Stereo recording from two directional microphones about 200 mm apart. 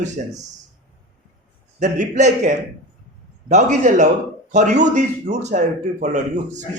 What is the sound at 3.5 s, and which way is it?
A man's voice, 40° right (ahead or behind).